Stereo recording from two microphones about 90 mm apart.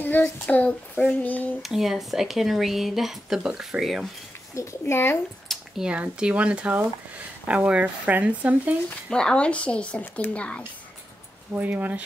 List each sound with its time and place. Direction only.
0.0 s child singing: 20° left (ahead or behind)
1.6 s speech: 5° right (ahead or behind)
4.6 s a child's voice: 30° left (ahead or behind)
5.5 s speech: 10° right (ahead or behind)
9.1 s child singing: 10° left (ahead or behind)
11.5 s speech: 20° right (ahead or behind)